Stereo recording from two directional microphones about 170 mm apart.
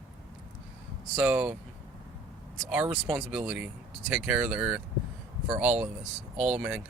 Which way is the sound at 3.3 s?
5° right (ahead or behind).